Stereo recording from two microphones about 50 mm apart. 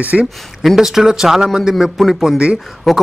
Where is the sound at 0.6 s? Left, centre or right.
Centre.